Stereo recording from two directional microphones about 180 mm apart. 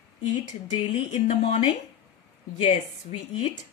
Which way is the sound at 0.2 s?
40° left (ahead or behind).